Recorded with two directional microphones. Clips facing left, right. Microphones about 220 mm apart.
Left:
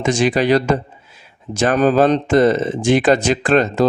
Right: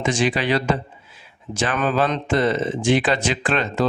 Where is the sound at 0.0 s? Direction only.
45° left (ahead or behind).